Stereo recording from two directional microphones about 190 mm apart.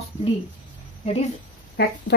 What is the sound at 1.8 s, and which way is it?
Speech, 55° left (ahead or behind).